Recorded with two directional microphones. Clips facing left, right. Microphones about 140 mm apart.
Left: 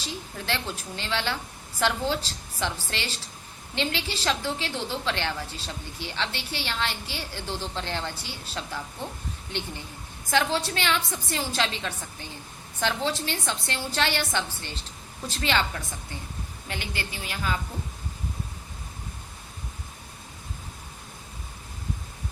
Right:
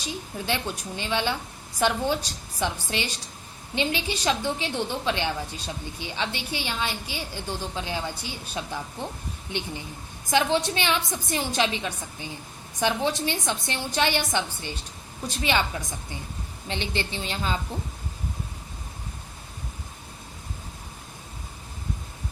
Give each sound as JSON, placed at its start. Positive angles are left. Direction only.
{"t": 0.0, "sound": "a woman's voice", "side_deg": -15}